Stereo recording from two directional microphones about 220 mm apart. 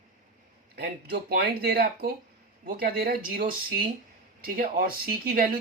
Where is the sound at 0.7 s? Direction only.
45° right (ahead or behind).